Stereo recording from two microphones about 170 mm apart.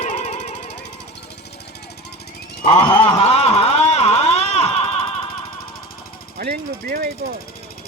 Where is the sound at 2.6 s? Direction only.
30° left (ahead or behind).